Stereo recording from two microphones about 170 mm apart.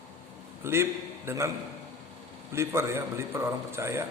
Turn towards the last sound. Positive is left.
turn(degrees=-15)  # may be behind; listen again after turning